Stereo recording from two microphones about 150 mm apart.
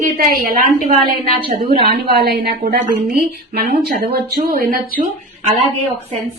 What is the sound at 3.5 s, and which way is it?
Speech, 80° right.